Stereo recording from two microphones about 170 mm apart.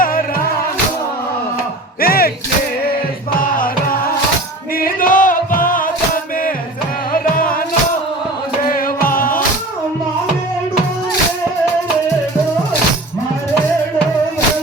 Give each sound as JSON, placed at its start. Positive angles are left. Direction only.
{"t": 0.0, "sound": "music", "side_deg": 55}
{"t": 2.0, "sound": "music", "side_deg": 60}
{"t": 3.3, "sound": "music", "side_deg": 55}
{"t": 7.1, "sound": "music", "side_deg": 55}
{"t": 8.7, "sound": "music", "side_deg": 55}